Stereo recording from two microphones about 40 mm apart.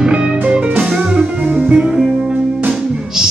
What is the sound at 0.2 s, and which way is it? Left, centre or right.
Music, right.